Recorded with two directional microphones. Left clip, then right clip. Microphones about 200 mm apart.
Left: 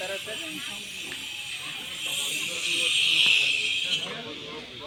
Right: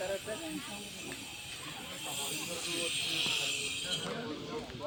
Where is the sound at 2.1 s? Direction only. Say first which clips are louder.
Left 9 dB; 60° right (ahead or behind).